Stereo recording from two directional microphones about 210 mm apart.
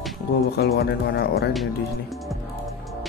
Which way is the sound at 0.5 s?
50° left (ahead or behind).